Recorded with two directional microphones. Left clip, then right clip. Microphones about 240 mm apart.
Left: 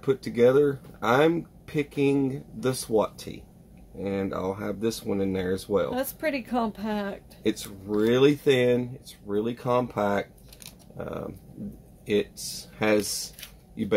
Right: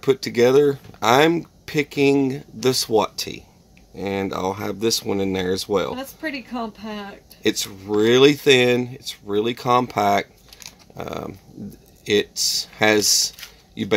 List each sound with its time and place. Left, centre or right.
0.0 s speech: right
5.9 s a woman's voice: left
7.4 s speech: right